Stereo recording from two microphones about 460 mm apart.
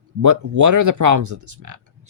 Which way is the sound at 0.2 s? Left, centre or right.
Right.